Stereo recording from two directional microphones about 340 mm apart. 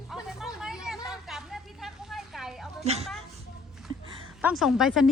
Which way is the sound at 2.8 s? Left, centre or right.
Centre.